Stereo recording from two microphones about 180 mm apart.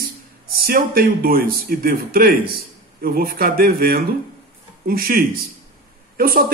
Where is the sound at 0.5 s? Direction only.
55° right (ahead or behind).